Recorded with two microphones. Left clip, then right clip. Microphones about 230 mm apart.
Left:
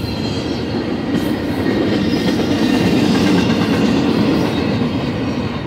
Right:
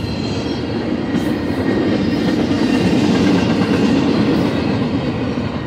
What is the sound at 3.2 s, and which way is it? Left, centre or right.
Vehicle, left.